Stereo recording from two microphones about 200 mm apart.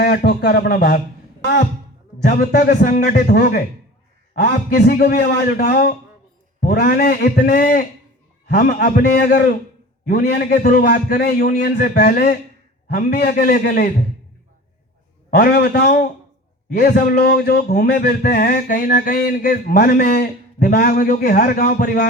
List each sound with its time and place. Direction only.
0.0 s speech: 50° left (ahead or behind)
2.2 s speech: 45° left (ahead or behind)
15.3 s speech: 50° left (ahead or behind)